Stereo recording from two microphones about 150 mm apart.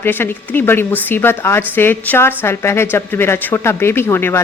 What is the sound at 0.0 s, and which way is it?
A woman's voice, 15° left (ahead or behind).